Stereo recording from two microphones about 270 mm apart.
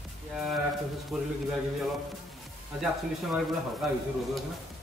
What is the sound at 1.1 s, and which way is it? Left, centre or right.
Speech, centre.